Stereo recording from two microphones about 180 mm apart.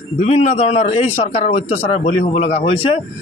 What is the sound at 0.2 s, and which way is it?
Speech, 35° left (ahead or behind).